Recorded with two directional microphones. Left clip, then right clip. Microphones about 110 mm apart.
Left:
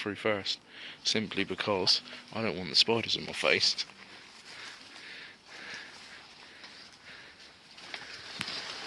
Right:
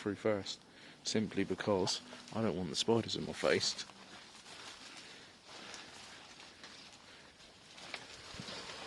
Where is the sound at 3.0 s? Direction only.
50° right (ahead or behind).